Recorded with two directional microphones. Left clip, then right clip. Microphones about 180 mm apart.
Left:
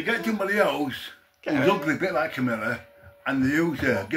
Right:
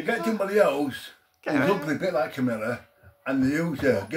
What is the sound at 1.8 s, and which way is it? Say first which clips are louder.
Speech: left 1 dB; 25° right (ahead or behind).